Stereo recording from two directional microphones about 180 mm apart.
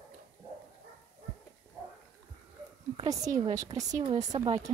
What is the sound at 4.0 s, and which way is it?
Speech, 35° right (ahead or behind).